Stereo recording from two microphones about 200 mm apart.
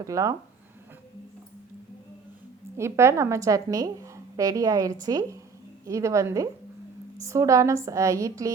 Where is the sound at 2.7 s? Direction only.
15° right (ahead or behind).